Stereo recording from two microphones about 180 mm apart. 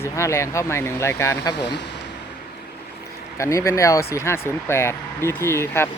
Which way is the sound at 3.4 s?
15° left (ahead or behind).